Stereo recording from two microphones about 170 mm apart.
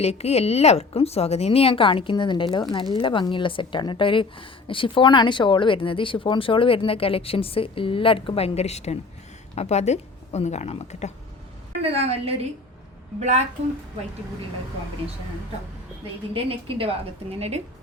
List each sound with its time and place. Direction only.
0.0 s a woman's voice: 40° left (ahead or behind)
11.8 s a woman's voice: 35° right (ahead or behind)
16.3 s a woman's voice: 30° right (ahead or behind)